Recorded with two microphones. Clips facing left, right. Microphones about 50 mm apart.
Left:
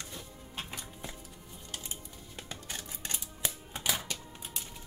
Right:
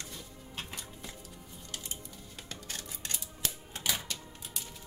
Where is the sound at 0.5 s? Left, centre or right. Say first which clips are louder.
Left 1 dB; centre.